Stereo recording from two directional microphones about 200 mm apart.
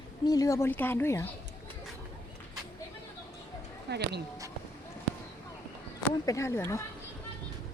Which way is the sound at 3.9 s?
55° right (ahead or behind).